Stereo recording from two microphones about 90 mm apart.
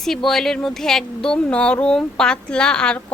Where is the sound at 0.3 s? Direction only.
5° left (ahead or behind).